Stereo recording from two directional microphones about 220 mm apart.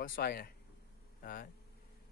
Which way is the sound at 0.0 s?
40° left (ahead or behind).